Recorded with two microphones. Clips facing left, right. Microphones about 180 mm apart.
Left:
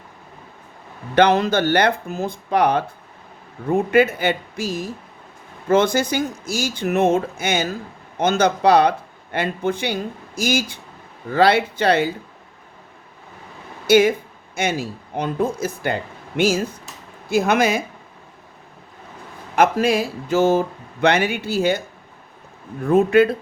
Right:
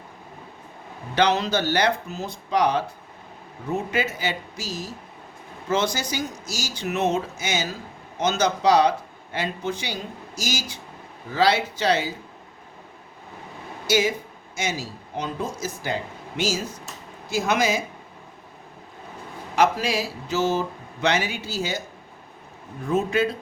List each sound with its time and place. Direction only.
1.1 s speech: 55° left (ahead or behind)
13.8 s speech: 55° left (ahead or behind)
19.5 s speech: 55° left (ahead or behind)